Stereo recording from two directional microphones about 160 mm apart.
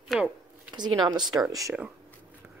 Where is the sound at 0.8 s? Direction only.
25° right (ahead or behind).